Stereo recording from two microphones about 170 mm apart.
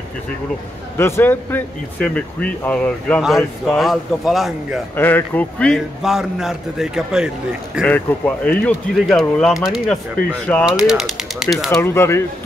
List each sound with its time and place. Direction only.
0.9 s a man's voice: 15° left (ahead or behind); by 4.8 s centre (ahead or behind)
4.9 s a man's voice: 10° left (ahead or behind)
11.7 s speech: 15° left (ahead or behind)